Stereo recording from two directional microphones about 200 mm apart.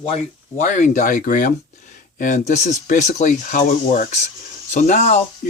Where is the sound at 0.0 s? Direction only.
30° left (ahead or behind).